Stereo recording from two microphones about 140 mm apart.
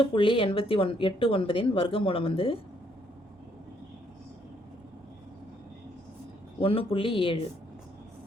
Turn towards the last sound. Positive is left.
turn(degrees=40)  # may be behind; listen again after turning